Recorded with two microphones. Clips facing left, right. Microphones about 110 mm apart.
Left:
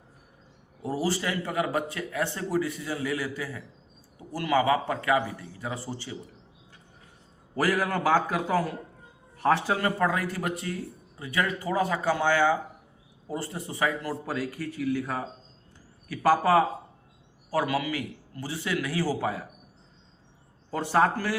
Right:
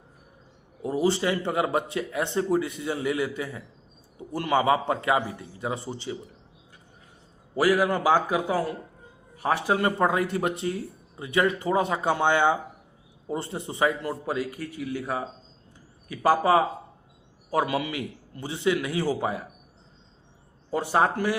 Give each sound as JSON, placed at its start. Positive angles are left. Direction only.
{"t": 0.9, "sound": "speech", "side_deg": -20}
{"t": 7.5, "sound": "a man's voice", "side_deg": -10}
{"t": 9.8, "sound": "a man's voice", "side_deg": -25}
{"t": 20.7, "sound": "a man's voice", "side_deg": -15}